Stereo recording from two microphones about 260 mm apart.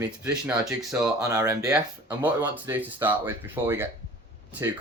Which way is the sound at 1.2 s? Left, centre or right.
Centre.